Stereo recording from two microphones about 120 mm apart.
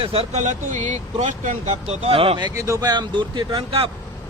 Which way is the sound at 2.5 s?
25° right (ahead or behind).